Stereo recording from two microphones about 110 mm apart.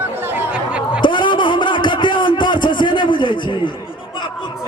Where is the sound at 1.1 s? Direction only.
45° left (ahead or behind).